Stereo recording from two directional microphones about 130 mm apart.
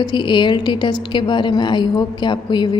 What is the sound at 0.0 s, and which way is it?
A woman's voice, 35° left (ahead or behind).